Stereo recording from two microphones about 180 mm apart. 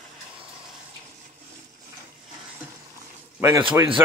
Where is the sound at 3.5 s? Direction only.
25° right (ahead or behind).